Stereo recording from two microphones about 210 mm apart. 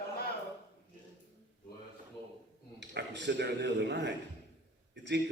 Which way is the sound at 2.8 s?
55° right (ahead or behind).